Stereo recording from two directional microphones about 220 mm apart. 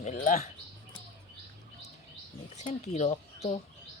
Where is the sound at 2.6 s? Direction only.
30° left (ahead or behind).